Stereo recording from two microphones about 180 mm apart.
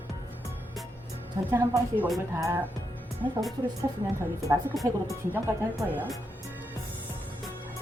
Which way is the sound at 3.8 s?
15° right (ahead or behind).